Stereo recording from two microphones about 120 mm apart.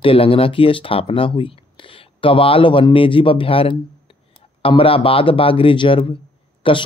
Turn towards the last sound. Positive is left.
turn(degrees=45)  # may be behind; listen again after turning